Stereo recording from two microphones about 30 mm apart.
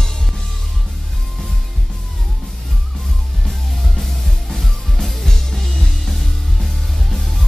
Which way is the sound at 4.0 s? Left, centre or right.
Centre.